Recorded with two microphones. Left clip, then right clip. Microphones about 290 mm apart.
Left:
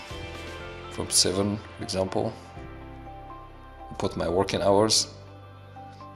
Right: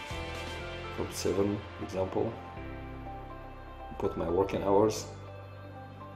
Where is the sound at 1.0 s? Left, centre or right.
Left.